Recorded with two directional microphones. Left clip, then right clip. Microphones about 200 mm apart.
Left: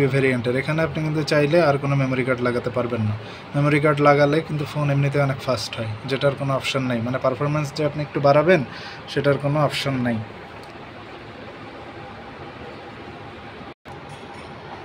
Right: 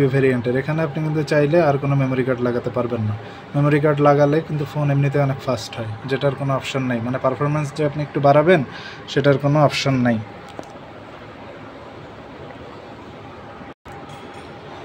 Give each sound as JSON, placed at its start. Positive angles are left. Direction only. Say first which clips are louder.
{"t": 0.0, "sound": "speech", "louder": "right 2 dB", "side_deg": -10}